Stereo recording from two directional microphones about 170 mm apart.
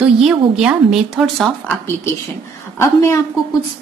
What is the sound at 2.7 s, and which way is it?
Speech, 15° left (ahead or behind).